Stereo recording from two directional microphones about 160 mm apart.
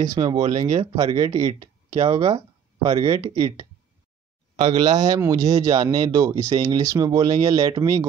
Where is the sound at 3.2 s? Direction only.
30° right (ahead or behind).